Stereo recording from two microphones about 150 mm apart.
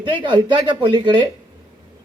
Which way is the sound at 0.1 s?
30° right (ahead or behind).